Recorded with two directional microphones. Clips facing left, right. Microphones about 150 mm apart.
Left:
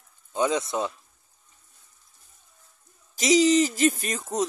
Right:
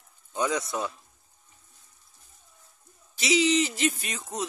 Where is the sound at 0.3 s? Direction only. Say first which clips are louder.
Left 3 dB; 20° left (ahead or behind).